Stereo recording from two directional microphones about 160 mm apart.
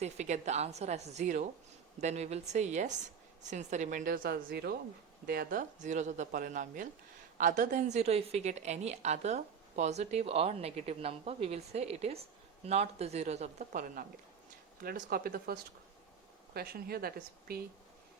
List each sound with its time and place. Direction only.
0.0 s a woman's voice: 45° right (ahead or behind); by 4.8 s 80° right
5.2 s a woman's voice: 70° right (ahead or behind)
16.6 s speech: 70° right (ahead or behind)